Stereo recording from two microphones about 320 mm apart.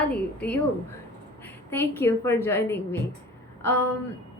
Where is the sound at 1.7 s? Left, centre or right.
Centre.